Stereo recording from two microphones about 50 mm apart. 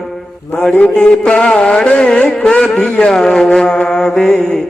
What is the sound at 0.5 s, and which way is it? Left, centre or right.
Music, centre.